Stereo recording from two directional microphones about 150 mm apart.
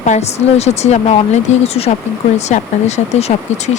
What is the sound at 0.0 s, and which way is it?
Speech, 50° left (ahead or behind).